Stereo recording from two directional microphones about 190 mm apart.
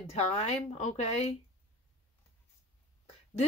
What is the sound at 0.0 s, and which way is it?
Speech, 35° left (ahead or behind).